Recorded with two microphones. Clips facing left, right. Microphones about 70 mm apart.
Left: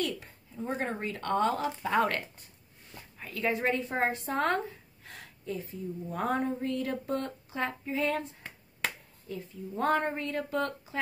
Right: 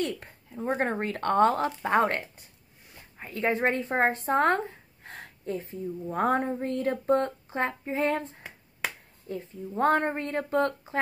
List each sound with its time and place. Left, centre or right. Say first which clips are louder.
0.2 s speech: right 4 dB; right
9.3 s speech: right 4 dB; right